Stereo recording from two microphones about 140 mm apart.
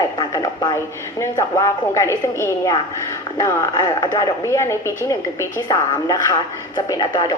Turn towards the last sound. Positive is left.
turn(degrees=30)  # may be behind; listen again after turning